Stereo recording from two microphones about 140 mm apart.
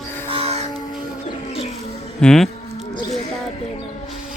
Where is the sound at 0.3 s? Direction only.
45° right (ahead or behind).